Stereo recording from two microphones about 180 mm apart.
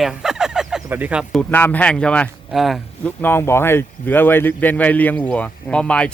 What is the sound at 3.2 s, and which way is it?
Speech, 10° left (ahead or behind).